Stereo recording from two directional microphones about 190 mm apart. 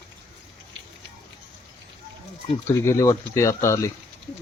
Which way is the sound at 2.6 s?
15° left (ahead or behind).